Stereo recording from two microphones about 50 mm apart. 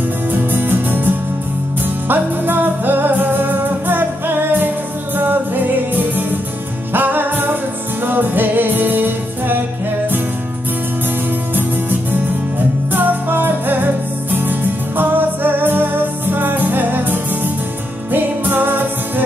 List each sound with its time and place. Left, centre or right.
0.3 s music: right
11.5 s music: right